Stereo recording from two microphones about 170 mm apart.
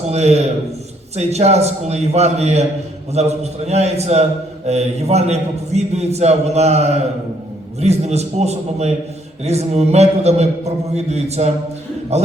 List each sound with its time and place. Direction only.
0.1 s a man's voice: 40° right (ahead or behind)